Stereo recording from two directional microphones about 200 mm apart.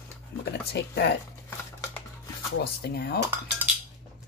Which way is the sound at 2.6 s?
55° left (ahead or behind).